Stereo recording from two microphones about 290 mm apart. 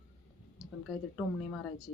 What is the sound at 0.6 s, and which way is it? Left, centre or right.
Speech, centre.